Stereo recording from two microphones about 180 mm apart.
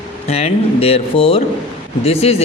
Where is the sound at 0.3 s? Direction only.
35° left (ahead or behind).